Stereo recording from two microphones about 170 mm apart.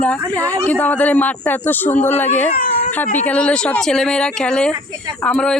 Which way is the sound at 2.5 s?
60° left (ahead or behind).